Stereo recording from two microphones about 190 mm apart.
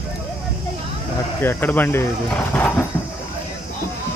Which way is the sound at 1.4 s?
10° left (ahead or behind).